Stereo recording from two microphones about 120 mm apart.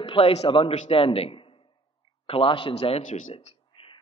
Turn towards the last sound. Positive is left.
turn(degrees=50)  # may be behind; listen again after turning